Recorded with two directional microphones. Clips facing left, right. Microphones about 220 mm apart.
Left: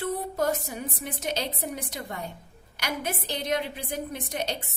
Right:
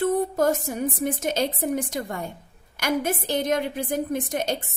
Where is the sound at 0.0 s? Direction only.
45° right (ahead or behind).